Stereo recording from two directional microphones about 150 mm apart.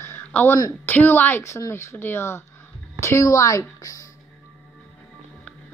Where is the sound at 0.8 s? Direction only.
15° left (ahead or behind).